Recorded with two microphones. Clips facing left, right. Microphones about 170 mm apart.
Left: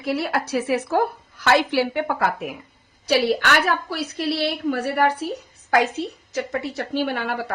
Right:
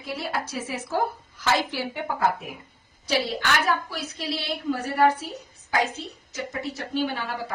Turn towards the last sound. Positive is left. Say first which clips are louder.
# left 4 dB
turn(degrees=65)  # may be behind; listen again after turning